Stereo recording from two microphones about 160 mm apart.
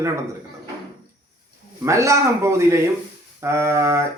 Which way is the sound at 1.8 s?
20° right (ahead or behind).